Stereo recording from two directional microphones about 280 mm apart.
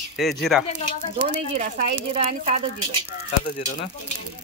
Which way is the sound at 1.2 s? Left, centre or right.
Right.